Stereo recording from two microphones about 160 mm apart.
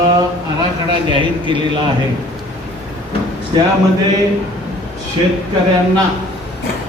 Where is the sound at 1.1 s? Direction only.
30° right (ahead or behind).